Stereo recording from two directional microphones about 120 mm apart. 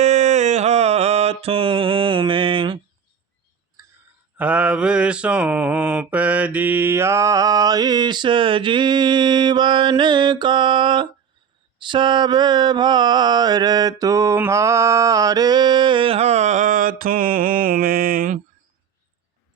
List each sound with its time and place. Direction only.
0.0 s mantra: 70° right (ahead or behind); by 2.8 s 45° right (ahead or behind)
4.4 s mantra: 10° right (ahead or behind); by 16.8 s 90° right